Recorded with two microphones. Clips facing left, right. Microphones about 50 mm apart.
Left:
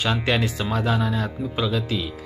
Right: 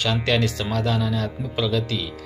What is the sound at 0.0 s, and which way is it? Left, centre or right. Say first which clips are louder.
Speech: right 1 dB; centre.